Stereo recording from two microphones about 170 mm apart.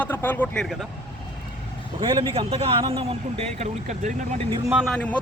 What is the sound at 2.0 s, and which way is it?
A man's voice, 30° right (ahead or behind).